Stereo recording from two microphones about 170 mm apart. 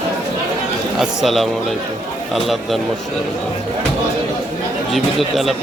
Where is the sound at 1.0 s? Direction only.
Centre (ahead or behind).